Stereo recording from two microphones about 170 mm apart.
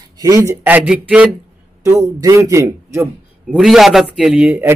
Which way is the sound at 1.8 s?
20° right (ahead or behind).